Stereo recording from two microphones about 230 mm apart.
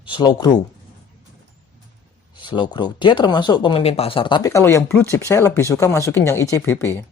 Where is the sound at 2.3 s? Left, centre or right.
Left.